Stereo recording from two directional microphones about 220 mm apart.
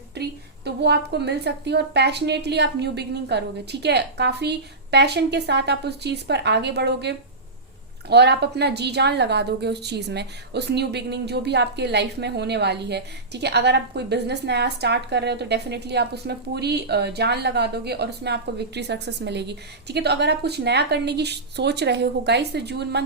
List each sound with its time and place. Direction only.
0.1 s a woman's voice: 50° right (ahead or behind)